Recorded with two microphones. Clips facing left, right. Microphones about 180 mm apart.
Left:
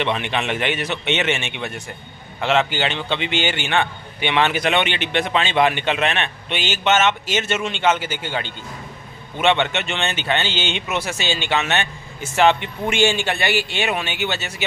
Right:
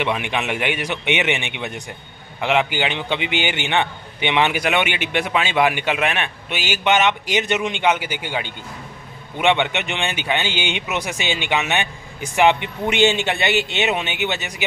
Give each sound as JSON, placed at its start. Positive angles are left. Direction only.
{"t": 0.0, "sound": "a man's voice", "side_deg": -10}